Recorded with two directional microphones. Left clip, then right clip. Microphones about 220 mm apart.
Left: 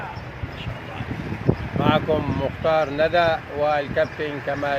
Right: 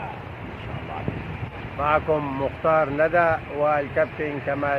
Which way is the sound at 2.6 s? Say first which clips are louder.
Even; 25° left (ahead or behind).